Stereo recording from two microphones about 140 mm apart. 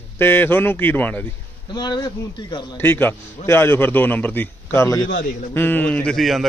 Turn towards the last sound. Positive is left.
turn(degrees=0)  # may be behind; listen again after turning